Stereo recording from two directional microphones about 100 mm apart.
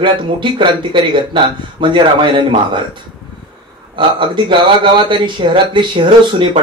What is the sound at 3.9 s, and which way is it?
Speech, 55° right (ahead or behind).